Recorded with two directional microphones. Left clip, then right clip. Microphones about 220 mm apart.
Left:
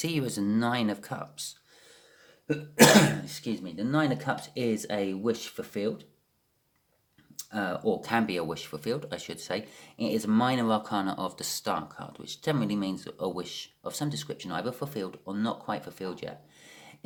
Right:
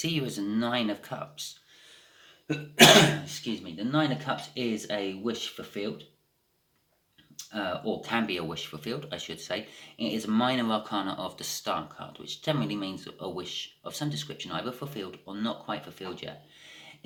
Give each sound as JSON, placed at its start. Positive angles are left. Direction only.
{"t": 0.0, "sound": "speech", "side_deg": 50}
{"t": 2.5, "sound": "speech", "side_deg": 50}
{"t": 7.3, "sound": "speech", "side_deg": 50}